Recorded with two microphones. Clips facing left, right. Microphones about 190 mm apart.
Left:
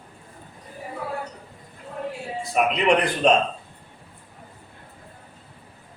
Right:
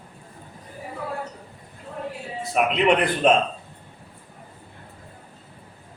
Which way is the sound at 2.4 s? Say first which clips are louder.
Even; centre (ahead or behind).